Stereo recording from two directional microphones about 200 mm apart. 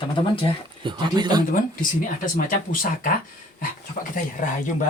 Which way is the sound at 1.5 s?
45° left (ahead or behind).